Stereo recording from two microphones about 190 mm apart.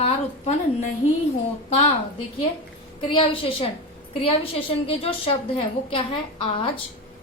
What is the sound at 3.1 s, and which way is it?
A woman's voice, 30° left (ahead or behind).